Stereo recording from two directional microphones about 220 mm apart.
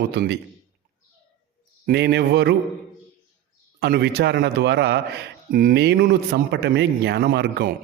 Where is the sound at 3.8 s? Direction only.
50° right (ahead or behind).